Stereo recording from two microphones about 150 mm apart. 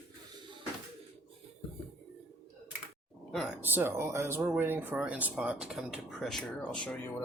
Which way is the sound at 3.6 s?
15° right (ahead or behind).